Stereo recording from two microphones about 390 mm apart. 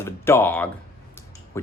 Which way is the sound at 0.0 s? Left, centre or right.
Centre.